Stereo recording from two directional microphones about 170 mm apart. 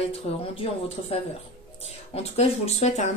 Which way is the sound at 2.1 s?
35° left (ahead or behind).